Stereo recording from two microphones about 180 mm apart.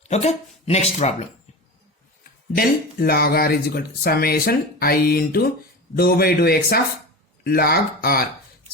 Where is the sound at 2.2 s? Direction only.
55° left (ahead or behind).